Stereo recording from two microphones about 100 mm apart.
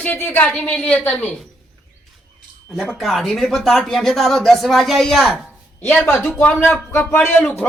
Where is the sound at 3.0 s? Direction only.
Centre (ahead or behind).